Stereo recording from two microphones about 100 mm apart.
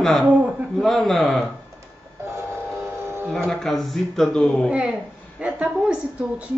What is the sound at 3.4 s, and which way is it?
A man's voice, 5° left (ahead or behind).